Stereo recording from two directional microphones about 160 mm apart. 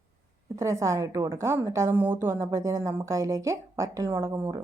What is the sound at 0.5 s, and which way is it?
A woman's voice, 20° right (ahead or behind).